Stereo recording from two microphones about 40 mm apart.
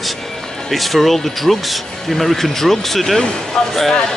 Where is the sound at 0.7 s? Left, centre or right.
Centre.